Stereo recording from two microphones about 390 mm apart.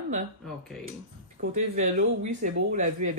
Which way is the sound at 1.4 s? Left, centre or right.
Right.